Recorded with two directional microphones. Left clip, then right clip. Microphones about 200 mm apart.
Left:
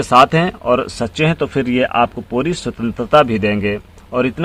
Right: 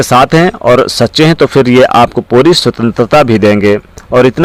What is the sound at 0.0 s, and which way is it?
Speech, 40° right (ahead or behind).